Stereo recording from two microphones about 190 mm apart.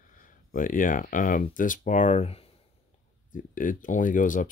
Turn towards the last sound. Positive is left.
turn(degrees=45)  # may be behind; listen again after turning